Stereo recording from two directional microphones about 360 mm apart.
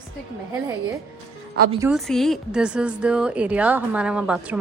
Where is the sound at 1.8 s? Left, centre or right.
Centre.